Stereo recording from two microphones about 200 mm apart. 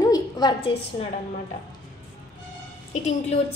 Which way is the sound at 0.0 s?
20° left (ahead or behind).